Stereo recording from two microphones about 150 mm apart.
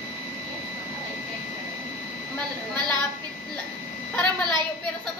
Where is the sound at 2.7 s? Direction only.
30° right (ahead or behind).